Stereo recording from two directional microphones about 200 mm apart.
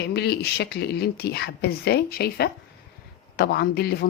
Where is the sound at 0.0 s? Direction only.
55° left (ahead or behind).